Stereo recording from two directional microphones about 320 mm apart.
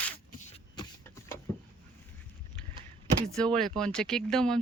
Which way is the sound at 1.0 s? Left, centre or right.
Centre.